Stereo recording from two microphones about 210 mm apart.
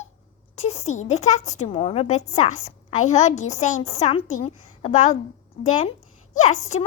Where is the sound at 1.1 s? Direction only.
35° left (ahead or behind).